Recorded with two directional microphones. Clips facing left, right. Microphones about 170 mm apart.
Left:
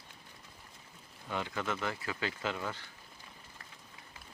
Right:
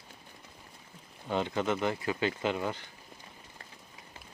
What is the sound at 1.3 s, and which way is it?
Speech, 25° right (ahead or behind).